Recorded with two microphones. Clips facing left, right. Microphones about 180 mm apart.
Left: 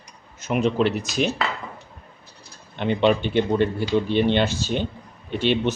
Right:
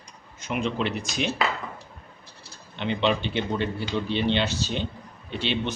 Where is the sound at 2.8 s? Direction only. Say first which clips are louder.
Left 5 dB; 50° left (ahead or behind).